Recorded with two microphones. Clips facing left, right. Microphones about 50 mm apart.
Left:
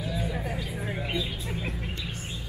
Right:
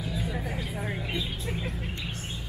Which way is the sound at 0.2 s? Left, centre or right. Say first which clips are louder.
Left 1 dB; centre.